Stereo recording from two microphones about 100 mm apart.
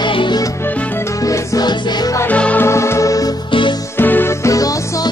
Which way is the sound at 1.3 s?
40° left (ahead or behind).